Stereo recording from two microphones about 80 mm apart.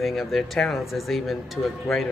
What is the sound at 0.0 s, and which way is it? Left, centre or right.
Speech, centre.